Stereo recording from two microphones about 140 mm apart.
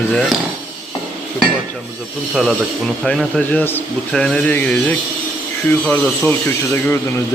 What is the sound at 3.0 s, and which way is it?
Speech, 5° left (ahead or behind).